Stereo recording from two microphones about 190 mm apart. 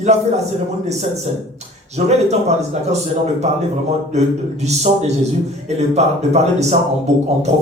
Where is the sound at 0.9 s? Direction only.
35° right (ahead or behind).